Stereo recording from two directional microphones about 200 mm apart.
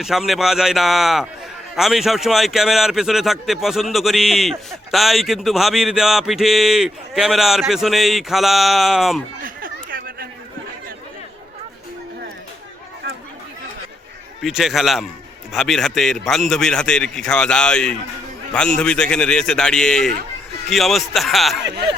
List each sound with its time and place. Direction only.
0.0 s a man's voice: centre (ahead or behind)
9.4 s a sound: 45° right (ahead or behind)
14.4 s a man's voice: centre (ahead or behind)